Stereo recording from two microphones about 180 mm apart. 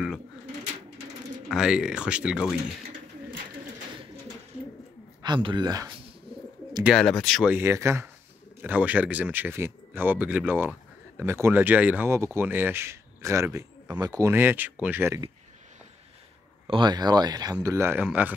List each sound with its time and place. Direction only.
1.5 s speech: 5° right (ahead or behind)
5.2 s speech: 25° right (ahead or behind)
6.8 s speech: centre (ahead or behind)
7.5 s speech: 15° right (ahead or behind)
16.6 s speech: 25° right (ahead or behind); by 18.3 s 10° right (ahead or behind)